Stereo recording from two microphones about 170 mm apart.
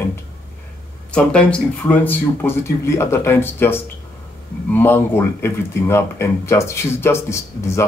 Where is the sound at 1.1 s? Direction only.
5° left (ahead or behind).